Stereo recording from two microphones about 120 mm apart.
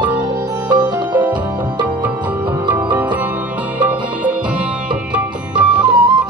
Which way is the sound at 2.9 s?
15° right (ahead or behind).